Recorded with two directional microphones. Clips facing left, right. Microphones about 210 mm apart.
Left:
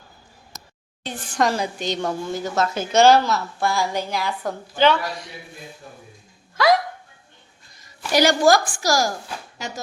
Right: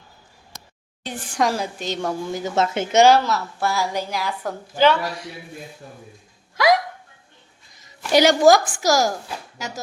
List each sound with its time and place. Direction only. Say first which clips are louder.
1.0 s a woman's voice: even; 15° right (ahead or behind)
3.1 s a woman's voice: left 1 dB; 5° right (ahead or behind)
8.1 s a woman's voice: right 2 dB; 20° right (ahead or behind)
9.6 s a woman's voice: left 1 dB; 5° right (ahead or behind)